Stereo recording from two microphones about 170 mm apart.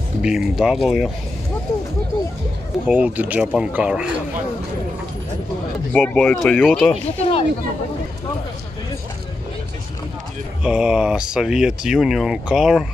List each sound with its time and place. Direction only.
0.2 s speech: 5° right (ahead or behind)
2.9 s speech: 10° right (ahead or behind)
5.9 s speech: 5° left (ahead or behind)
6.9 s speech: 35° left (ahead or behind)
10.6 s speech: 5° right (ahead or behind)